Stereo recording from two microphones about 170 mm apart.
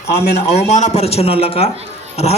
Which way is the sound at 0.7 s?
40° left (ahead or behind).